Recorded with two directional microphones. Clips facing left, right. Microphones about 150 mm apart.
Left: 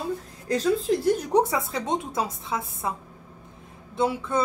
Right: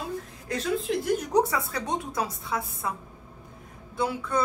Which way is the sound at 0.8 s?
25° left (ahead or behind).